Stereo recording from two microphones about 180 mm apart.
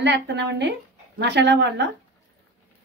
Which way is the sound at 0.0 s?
75° right (ahead or behind).